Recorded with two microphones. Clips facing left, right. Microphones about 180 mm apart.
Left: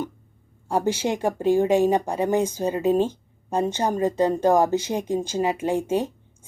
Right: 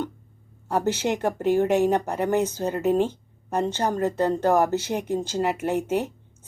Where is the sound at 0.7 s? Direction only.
10° left (ahead or behind).